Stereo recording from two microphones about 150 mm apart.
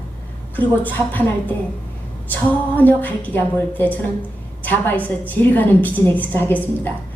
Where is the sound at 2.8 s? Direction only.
10° left (ahead or behind).